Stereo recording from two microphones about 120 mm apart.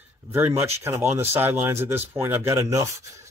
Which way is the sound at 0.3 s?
20° right (ahead or behind).